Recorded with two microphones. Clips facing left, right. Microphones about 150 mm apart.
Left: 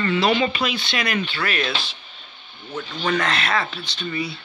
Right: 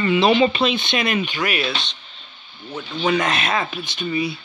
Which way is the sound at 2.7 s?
10° right (ahead or behind).